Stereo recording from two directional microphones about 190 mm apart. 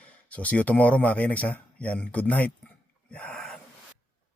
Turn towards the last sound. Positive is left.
turn(degrees=5)  # may be behind; listen again after turning